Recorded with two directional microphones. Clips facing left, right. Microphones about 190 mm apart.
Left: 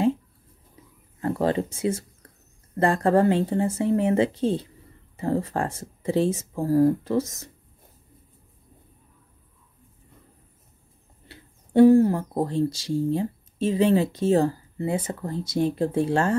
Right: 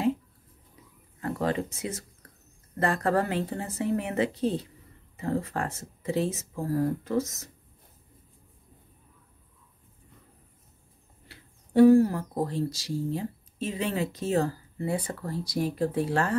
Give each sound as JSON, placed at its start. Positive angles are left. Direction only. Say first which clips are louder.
{"t": 1.2, "sound": "speech", "louder": "left 5 dB", "side_deg": 30}
{"t": 11.2, "sound": "speech", "louder": "left 5 dB", "side_deg": 25}